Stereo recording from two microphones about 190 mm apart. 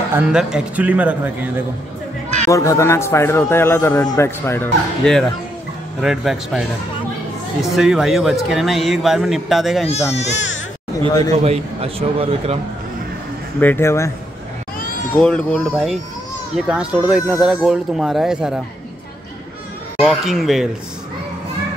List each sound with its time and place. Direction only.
0.1 s speech: 5° right (ahead or behind)
2.4 s a man's voice: 15° left (ahead or behind); by 6.6 s centre (ahead or behind)
7.6 s speech: centre (ahead or behind)
9.8 s speech: 35° left (ahead or behind)
11.3 s a man's voice: 35° right (ahead or behind)
13.6 s a man's voice: 10° left (ahead or behind)
15.1 s speech: 5° left (ahead or behind)
20.0 s speech: centre (ahead or behind)